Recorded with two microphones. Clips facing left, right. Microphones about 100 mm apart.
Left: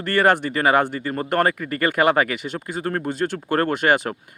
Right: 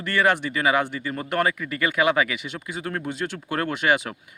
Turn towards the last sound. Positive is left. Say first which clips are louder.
# left 3 dB
turn(degrees=45)  # may be behind; listen again after turning